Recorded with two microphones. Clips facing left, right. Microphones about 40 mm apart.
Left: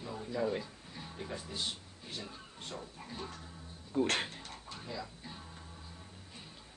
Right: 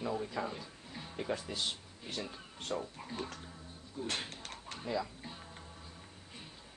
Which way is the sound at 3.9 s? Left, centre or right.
Left.